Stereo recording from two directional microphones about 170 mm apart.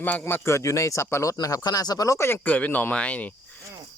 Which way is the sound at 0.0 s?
10° left (ahead or behind).